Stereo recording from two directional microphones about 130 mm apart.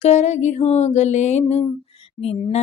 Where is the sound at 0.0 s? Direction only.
60° left (ahead or behind).